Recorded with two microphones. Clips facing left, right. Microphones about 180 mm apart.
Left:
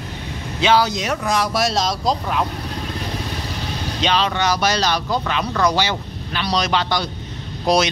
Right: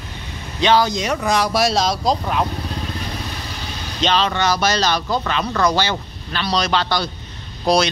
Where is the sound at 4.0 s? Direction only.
10° left (ahead or behind).